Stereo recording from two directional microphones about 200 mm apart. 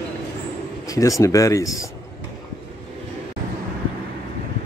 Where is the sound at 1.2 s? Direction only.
15° left (ahead or behind).